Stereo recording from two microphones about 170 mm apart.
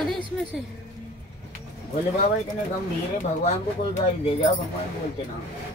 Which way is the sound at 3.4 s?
40° left (ahead or behind).